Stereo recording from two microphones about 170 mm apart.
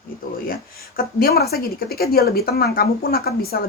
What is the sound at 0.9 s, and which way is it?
A woman's voice, 65° left (ahead or behind).